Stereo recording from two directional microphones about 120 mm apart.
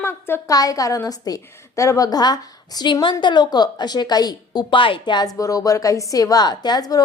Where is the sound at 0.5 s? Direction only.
30° left (ahead or behind).